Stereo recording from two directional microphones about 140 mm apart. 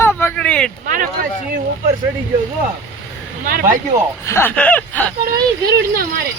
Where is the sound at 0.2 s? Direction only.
10° left (ahead or behind).